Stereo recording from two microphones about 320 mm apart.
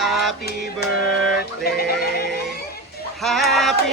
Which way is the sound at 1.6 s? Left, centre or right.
Left.